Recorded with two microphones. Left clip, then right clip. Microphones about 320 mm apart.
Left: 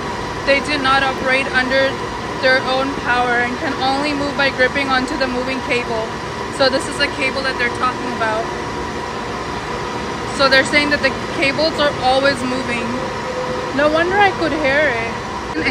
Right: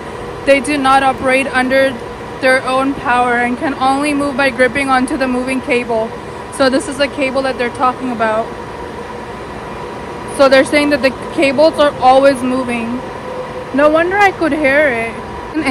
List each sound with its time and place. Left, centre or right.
0.5 s speech: centre
10.4 s speech: centre